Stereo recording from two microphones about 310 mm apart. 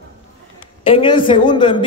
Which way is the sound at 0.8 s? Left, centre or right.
Centre.